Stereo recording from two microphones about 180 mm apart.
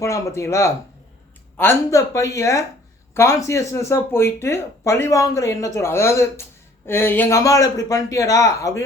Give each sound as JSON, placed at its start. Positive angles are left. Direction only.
{"t": 0.0, "sound": "speech", "side_deg": 15}